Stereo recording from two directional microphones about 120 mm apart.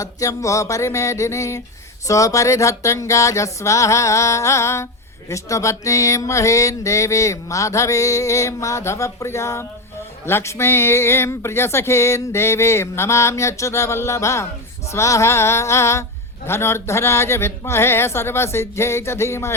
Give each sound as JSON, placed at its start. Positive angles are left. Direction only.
{"t": 0.0, "sound": "mantra", "side_deg": 25}